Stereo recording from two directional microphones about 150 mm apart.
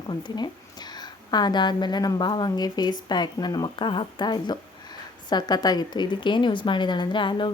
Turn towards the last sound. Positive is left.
turn(degrees=30)  # may be behind; listen again after turning